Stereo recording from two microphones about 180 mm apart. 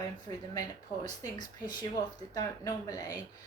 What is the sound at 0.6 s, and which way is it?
A woman's voice, 20° left (ahead or behind).